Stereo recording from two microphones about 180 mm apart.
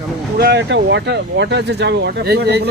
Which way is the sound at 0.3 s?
60° right (ahead or behind).